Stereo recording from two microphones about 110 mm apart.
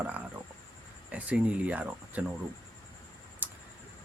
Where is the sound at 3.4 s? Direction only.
15° right (ahead or behind).